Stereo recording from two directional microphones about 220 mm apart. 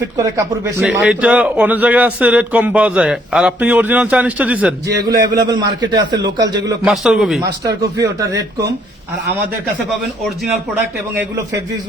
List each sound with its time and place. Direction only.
0.2 s a man's voice: 15° right (ahead or behind)
4.9 s a man's voice: 45° right (ahead or behind)
5.3 s a man's voice: 15° right (ahead or behind)
6.8 s a man's voice: centre (ahead or behind)
7.6 s a man's voice: 15° right (ahead or behind)
11.1 s a man's voice: 10° right (ahead or behind)